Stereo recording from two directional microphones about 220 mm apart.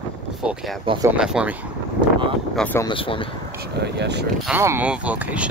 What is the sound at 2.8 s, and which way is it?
Speech, 25° left (ahead or behind).